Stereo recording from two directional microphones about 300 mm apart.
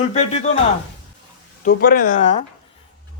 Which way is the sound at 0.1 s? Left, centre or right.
Left.